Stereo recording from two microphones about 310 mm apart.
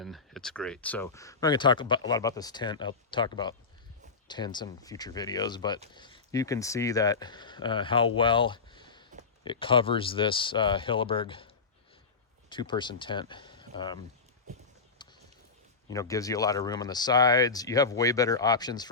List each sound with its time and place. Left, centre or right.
0.0 s speech: centre
15.0 s a sound: centre
15.9 s speech: centre